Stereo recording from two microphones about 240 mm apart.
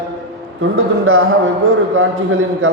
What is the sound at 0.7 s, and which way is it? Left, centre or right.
Speech, right.